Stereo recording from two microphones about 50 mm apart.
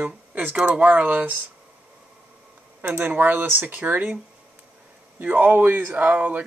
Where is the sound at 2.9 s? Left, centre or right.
Right.